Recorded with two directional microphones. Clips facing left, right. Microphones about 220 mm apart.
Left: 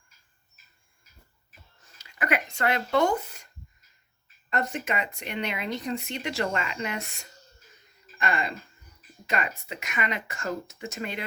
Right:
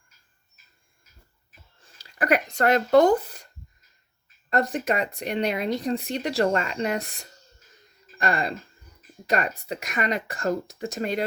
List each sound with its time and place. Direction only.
1.8 s speech: 35° right (ahead or behind)